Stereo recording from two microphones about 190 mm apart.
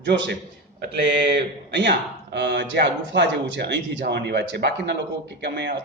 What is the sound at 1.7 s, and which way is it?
A man's voice, 65° right (ahead or behind).